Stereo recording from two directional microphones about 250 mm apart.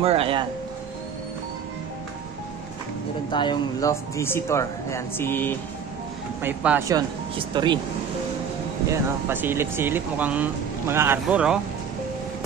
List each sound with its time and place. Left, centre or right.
0.0 s speech: right
3.3 s speech: centre
6.4 s speech: centre
8.9 s speech: centre